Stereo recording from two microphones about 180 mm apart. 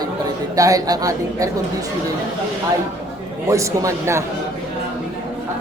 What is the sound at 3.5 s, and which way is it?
Speech, 15° right (ahead or behind).